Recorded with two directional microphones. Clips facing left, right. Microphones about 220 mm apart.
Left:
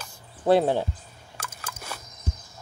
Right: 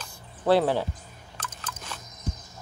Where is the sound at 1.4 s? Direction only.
10° left (ahead or behind).